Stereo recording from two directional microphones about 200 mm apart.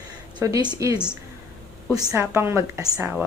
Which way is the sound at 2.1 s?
10° right (ahead or behind).